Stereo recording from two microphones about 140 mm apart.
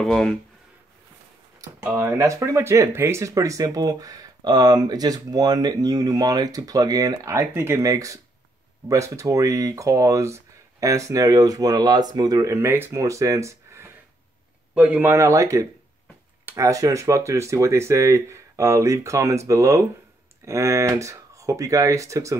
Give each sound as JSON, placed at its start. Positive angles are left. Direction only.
{"t": 0.0, "sound": "speech", "side_deg": 5}
{"t": 1.6, "sound": "speech", "side_deg": -20}
{"t": 14.7, "sound": "speech", "side_deg": -10}